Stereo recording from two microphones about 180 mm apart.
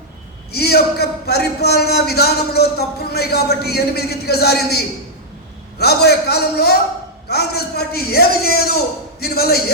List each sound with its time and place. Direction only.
0.5 s a man's voice: 60° left (ahead or behind)
5.8 s a man's voice: 60° left (ahead or behind)